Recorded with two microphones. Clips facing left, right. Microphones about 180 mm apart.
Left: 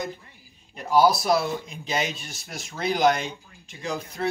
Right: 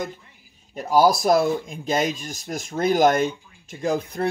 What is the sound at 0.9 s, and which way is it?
Speech, 45° right (ahead or behind).